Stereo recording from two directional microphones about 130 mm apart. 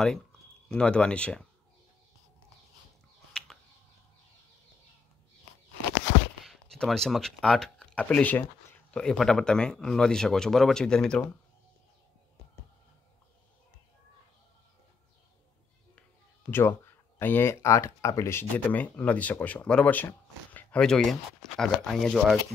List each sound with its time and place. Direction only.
0.0 s speech: 5° left (ahead or behind)
6.4 s speech: centre (ahead or behind)
16.4 s speech: 15° left (ahead or behind); by 22.4 s centre (ahead or behind)